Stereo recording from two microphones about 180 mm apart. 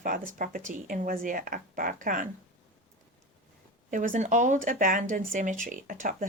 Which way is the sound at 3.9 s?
45° right (ahead or behind).